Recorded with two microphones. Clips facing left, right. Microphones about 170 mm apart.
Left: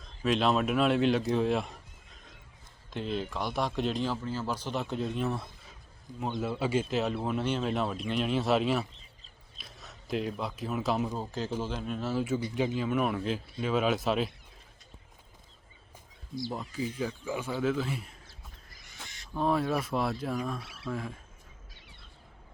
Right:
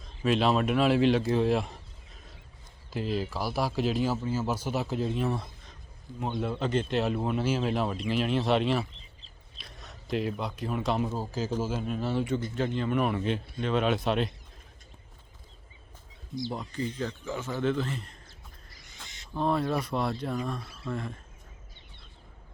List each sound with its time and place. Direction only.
0.2 s speech: centre (ahead or behind)
2.9 s speech: 5° right (ahead or behind)
16.5 s speech: 5° left (ahead or behind)
19.0 s a sound: 20° right (ahead or behind)
19.3 s speech: centre (ahead or behind)